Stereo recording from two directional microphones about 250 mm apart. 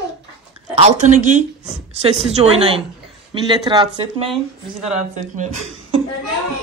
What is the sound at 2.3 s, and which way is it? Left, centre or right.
Speech, right.